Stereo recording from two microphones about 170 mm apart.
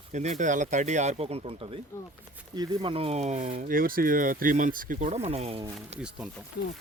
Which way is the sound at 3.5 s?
55° right (ahead or behind).